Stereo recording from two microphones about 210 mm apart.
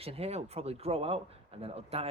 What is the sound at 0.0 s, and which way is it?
Speech, 30° right (ahead or behind).